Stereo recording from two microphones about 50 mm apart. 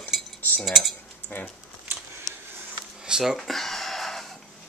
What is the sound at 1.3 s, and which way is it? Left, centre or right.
Speech, left.